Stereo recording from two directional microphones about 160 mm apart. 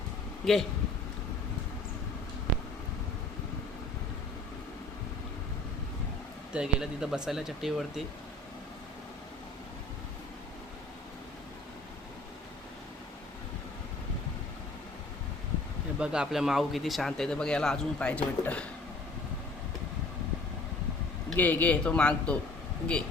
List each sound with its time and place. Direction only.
0.4 s speech: centre (ahead or behind)
6.5 s speech: 5° right (ahead or behind)
16.0 s speech: 5° right (ahead or behind)
21.2 s a man's voice: 10° left (ahead or behind)